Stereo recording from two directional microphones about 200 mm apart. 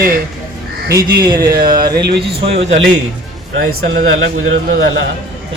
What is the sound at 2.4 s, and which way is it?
Speech, 30° right (ahead or behind).